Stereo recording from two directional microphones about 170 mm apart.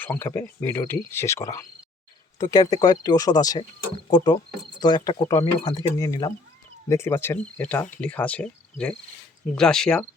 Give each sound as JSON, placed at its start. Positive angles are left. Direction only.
{"t": 0.0, "sound": "speech", "side_deg": 10}